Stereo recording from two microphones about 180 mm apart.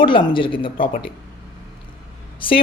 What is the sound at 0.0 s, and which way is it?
Speech, 25° left (ahead or behind).